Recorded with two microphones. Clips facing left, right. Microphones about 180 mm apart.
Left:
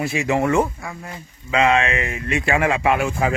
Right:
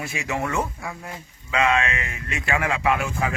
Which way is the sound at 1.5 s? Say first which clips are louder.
Left 4 dB; 30° left (ahead or behind).